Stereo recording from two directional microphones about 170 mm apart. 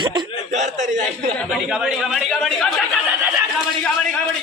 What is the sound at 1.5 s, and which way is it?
Speech, centre (ahead or behind).